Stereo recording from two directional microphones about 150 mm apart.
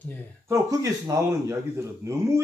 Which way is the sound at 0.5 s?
25° right (ahead or behind).